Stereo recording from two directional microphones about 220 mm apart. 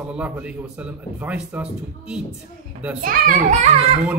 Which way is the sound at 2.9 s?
40° right (ahead or behind).